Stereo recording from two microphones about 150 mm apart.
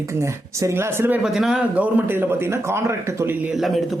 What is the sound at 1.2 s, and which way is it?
Speech, 5° right (ahead or behind).